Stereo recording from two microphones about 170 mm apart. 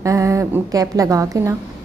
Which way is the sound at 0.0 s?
20° right (ahead or behind).